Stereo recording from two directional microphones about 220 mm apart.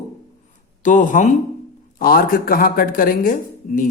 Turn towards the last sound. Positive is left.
turn(degrees=35)  # may be behind; listen again after turning